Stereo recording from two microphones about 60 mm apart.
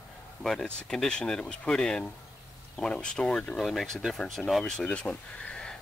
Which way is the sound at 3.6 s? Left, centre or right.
Centre.